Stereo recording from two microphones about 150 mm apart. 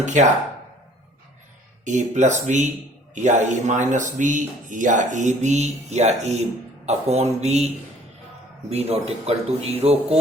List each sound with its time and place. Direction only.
0.0 s speech: 55° right (ahead or behind)
1.8 s speech: 55° right (ahead or behind)
8.7 s speech: 45° right (ahead or behind)